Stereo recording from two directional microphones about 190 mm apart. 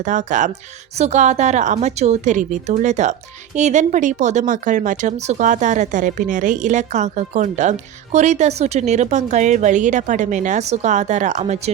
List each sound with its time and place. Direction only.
0.0 s a woman's voice: 40° right (ahead or behind)